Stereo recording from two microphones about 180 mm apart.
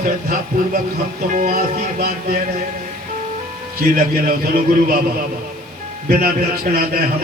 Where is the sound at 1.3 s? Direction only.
50° right (ahead or behind).